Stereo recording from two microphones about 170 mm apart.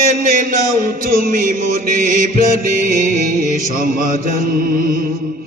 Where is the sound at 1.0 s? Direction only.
55° right (ahead or behind).